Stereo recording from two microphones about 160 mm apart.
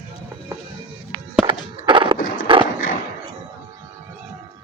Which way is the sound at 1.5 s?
30° right (ahead or behind).